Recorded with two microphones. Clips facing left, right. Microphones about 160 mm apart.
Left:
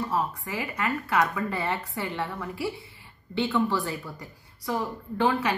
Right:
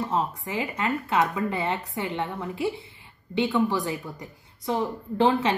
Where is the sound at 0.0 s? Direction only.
20° right (ahead or behind).